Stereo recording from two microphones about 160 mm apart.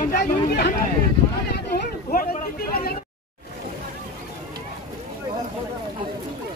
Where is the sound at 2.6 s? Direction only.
60° left (ahead or behind).